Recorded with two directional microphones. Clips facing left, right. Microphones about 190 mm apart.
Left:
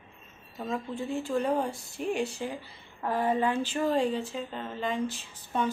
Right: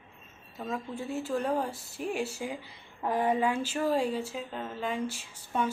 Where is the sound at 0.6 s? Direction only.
5° right (ahead or behind).